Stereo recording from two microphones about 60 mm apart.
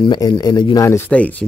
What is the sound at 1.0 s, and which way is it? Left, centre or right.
Speech, left.